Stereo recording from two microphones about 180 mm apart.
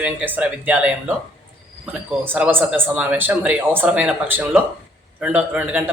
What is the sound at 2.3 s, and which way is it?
Speech, 10° right (ahead or behind).